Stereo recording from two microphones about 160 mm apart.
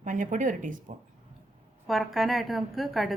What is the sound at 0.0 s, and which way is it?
Speech, 55° right (ahead or behind).